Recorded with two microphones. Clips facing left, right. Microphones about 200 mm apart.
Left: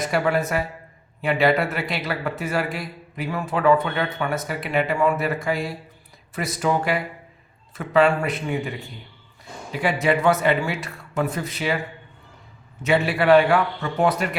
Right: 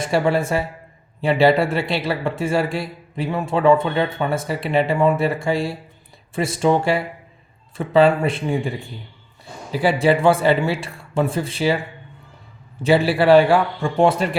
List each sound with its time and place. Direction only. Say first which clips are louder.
0.0 s a man's voice: right 3 dB; 30° right (ahead or behind)
9.7 s a man's voice: right 4 dB; 30° right (ahead or behind)
12.8 s a man's voice: right 4 dB; 30° right (ahead or behind)